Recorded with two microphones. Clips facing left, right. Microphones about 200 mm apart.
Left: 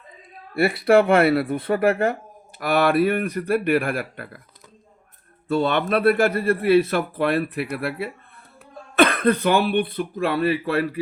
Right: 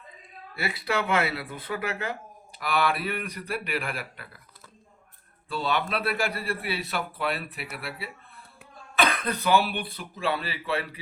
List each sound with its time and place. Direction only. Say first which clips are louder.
0.5 s a man's voice: left 13 dB; 55° left (ahead or behind)
5.5 s a man's voice: left 8 dB; 50° left (ahead or behind)